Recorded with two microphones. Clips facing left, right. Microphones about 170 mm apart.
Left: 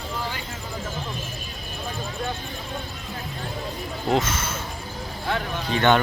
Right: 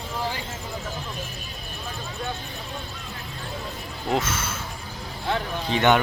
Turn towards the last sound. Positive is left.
turn(degrees=-15)  # may be behind; listen again after turning